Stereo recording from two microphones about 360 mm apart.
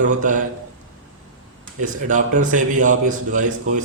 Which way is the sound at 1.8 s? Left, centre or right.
Right.